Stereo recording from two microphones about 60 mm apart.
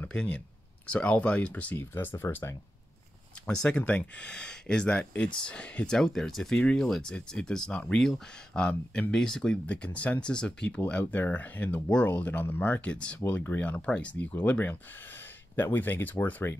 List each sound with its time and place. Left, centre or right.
0.1 s speech: centre
1.8 s speech: left
3.4 s speech: centre
5.9 s speech: centre
6.5 s speech: centre
10.9 s speech: left
12.9 s speech: centre